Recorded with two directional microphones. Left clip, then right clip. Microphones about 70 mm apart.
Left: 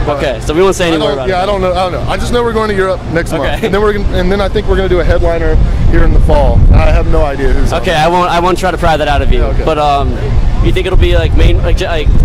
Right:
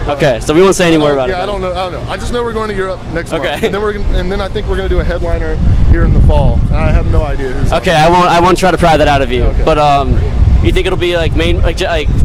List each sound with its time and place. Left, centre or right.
0.1 s a man's voice: right
1.3 s speech: left
3.3 s speech: right
3.7 s speech: left
7.7 s a man's voice: right